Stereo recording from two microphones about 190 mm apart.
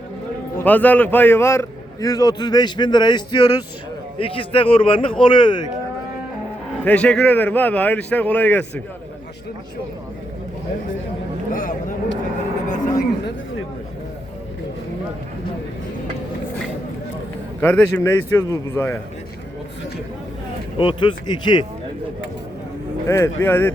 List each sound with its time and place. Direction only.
0.5 s a man's voice: 10° left (ahead or behind); by 5.6 s 25° left (ahead or behind)
6.8 s a man's voice: 5° left (ahead or behind)
12.6 s a sound: 40° left (ahead or behind)
17.6 s a man's voice: 10° left (ahead or behind)
20.7 s a man's voice: 25° left (ahead or behind)
23.0 s a man's voice: 15° left (ahead or behind)